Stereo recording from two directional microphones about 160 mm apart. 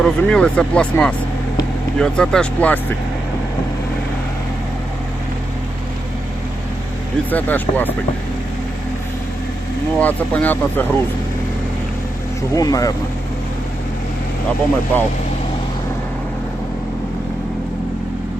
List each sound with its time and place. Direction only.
0.0 s speech: 5° left (ahead or behind)
7.3 s speech: 10° left (ahead or behind)
10.0 s speech: 10° left (ahead or behind)
12.5 s speech: 20° left (ahead or behind)
14.9 s speech: 10° left (ahead or behind)